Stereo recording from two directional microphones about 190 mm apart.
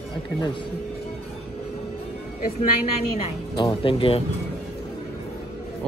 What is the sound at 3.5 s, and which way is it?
Speech, 25° left (ahead or behind).